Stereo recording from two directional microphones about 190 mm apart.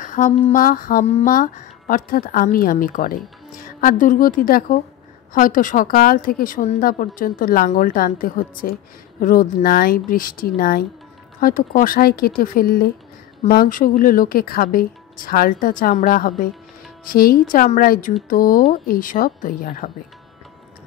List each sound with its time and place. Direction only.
0.0 s a woman's voice: 45° left (ahead or behind)
1.0 s speech: 35° left (ahead or behind)
1.3 s a woman's voice: 45° left (ahead or behind)